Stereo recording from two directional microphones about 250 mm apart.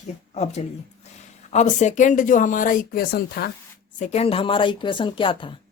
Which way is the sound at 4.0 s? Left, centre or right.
Left.